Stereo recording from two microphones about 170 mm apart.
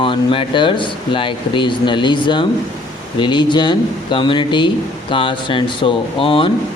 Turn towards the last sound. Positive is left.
turn(degrees=30)  # may be behind; listen again after turning